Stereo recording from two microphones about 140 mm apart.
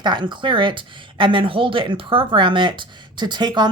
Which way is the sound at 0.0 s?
35° right (ahead or behind).